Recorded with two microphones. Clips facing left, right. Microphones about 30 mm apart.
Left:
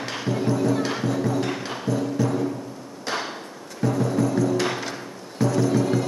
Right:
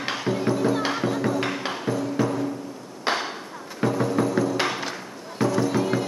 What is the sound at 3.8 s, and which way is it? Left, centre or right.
Music, right.